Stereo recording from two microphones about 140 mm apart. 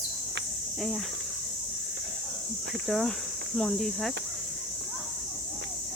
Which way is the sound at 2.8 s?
Centre (ahead or behind).